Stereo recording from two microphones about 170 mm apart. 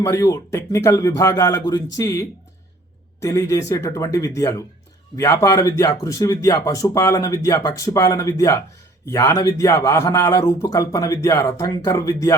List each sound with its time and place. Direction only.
0.0 s speech: 15° left (ahead or behind)